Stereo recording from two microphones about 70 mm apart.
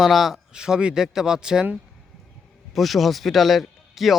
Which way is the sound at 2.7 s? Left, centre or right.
Centre.